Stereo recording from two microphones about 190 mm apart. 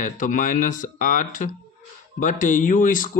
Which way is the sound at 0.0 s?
45° left (ahead or behind).